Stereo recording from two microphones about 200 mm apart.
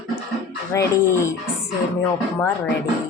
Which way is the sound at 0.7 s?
15° left (ahead or behind).